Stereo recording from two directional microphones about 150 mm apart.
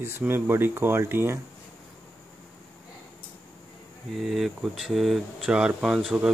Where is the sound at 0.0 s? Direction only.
15° right (ahead or behind).